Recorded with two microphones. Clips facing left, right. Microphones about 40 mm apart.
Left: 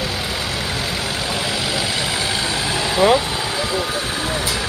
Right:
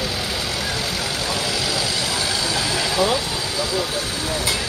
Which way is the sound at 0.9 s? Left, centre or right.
Centre.